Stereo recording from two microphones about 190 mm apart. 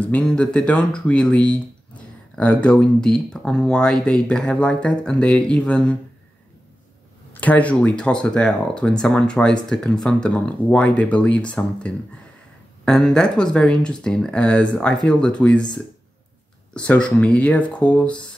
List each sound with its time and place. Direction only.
0.0 s speech: 5° left (ahead or behind)
7.3 s speech: 5° left (ahead or behind)